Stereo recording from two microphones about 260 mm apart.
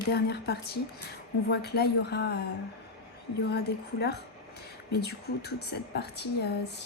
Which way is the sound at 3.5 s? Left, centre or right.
Left.